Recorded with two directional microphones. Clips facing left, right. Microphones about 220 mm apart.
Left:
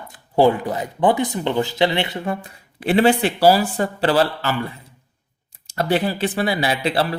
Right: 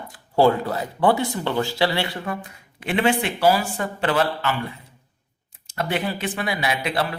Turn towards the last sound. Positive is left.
turn(degrees=30)  # may be behind; listen again after turning